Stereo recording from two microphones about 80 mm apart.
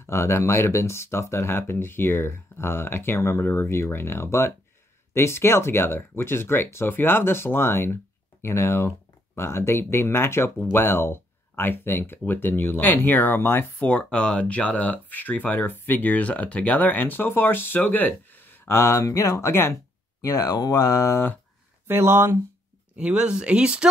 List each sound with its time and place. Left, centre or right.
0.0 s speech: left
21.8 s speech: right
22.9 s speech: centre